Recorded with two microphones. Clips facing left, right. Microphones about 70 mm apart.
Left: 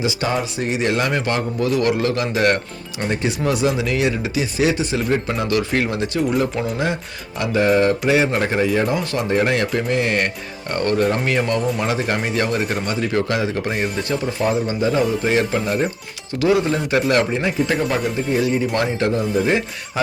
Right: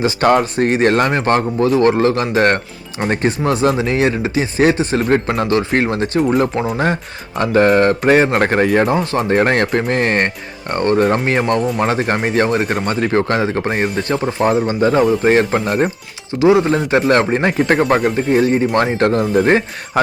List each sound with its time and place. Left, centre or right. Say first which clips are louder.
0.0 s a man's voice: right 8 dB; right
5.5 s a man's voice: right 3 dB; right
16.4 s speech: right 5 dB; right
16.7 s speech: right 4 dB; right
17.4 s a man's voice: right 5 dB; right